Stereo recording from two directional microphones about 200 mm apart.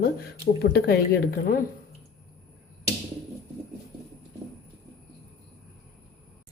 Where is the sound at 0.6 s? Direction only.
55° left (ahead or behind).